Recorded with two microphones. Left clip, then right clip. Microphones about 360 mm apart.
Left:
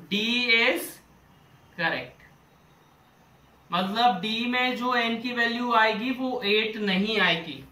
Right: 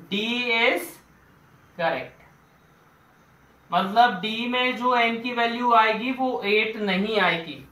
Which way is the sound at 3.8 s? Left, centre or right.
Centre.